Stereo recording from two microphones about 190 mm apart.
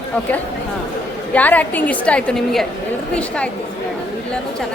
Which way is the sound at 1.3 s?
10° left (ahead or behind).